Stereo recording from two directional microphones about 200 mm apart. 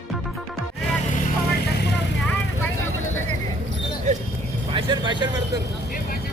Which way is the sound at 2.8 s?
90° left.